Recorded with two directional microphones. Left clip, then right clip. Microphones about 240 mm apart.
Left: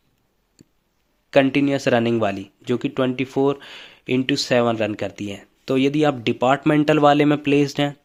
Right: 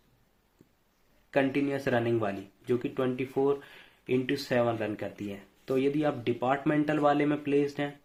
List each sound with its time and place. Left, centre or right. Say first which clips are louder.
1.3 s speech: left 11 dB; left